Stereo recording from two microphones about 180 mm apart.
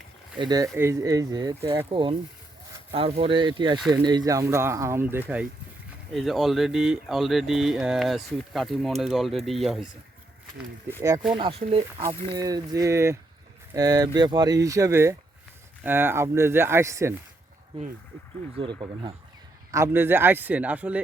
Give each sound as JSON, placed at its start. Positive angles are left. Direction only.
{"t": 0.3, "sound": "speech", "side_deg": -25}
{"t": 11.3, "sound": "speech", "side_deg": -30}
{"t": 12.0, "sound": "speech", "side_deg": -20}
{"t": 18.6, "sound": "speech", "side_deg": -25}
{"t": 19.7, "sound": "speech", "side_deg": -15}